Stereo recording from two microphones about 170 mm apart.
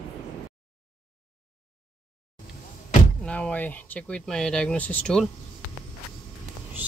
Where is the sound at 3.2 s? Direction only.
5° left (ahead or behind).